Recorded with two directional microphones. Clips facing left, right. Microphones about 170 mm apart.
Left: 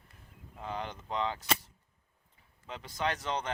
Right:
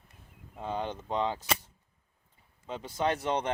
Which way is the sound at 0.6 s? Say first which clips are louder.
Right 5 dB; 25° right (ahead or behind).